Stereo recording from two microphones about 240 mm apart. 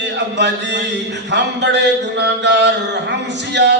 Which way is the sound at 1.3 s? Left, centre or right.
Right.